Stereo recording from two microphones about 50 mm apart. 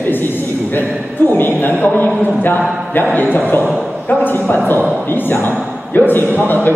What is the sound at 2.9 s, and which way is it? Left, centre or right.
Speech, left.